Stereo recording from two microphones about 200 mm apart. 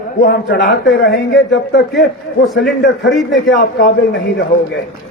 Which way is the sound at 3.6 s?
50° left (ahead or behind).